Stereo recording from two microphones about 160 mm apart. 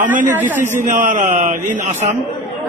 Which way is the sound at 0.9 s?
55° right (ahead or behind).